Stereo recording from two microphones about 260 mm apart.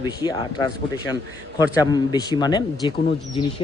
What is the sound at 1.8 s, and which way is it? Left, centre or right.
Speech, centre.